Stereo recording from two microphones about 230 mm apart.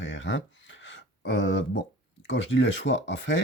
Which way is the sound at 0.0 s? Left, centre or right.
Left.